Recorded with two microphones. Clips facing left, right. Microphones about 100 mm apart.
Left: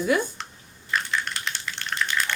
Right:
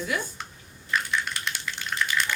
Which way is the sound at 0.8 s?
Centre (ahead or behind).